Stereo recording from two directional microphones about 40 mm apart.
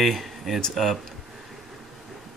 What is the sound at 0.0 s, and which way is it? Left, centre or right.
Speech, centre.